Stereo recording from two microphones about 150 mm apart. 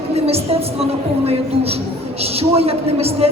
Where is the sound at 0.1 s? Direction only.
45° right (ahead or behind).